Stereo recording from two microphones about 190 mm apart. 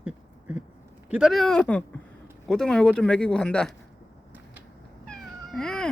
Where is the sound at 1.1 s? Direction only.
5° right (ahead or behind).